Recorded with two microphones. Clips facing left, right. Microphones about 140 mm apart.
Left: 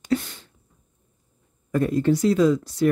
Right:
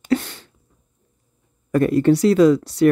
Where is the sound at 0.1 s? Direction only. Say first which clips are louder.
Right 4 dB; 70° right (ahead or behind).